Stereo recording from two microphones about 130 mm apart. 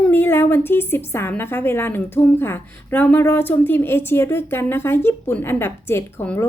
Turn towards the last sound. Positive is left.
turn(degrees=15)  # may be behind; listen again after turning